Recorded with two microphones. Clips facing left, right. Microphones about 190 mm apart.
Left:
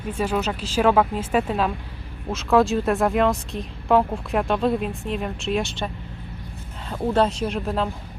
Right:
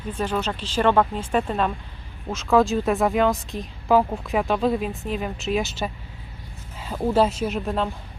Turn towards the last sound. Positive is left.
turn(degrees=0)  # may be behind; listen again after turning